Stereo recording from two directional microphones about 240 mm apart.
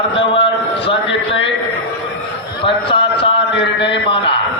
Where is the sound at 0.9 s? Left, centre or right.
Left.